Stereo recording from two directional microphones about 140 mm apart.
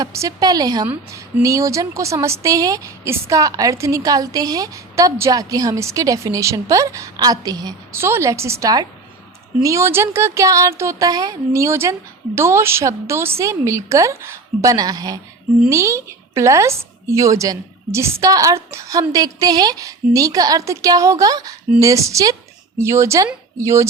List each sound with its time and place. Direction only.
0.0 s a woman's voice: 25° right (ahead or behind)